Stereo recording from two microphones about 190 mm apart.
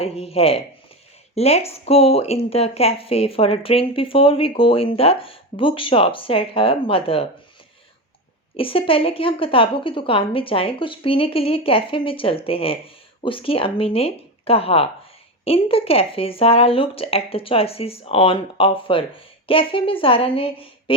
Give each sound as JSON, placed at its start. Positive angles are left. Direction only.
{"t": 0.0, "sound": "speech", "side_deg": 30}
{"t": 8.5, "sound": "speech", "side_deg": 30}